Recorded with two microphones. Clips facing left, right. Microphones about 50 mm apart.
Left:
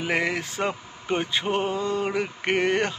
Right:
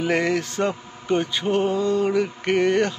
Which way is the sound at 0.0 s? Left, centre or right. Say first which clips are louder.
Right 4 dB; centre.